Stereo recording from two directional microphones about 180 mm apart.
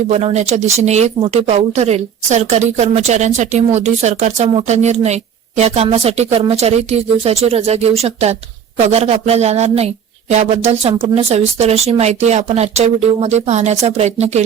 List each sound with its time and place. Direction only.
0.1 s speech: 35° right (ahead or behind)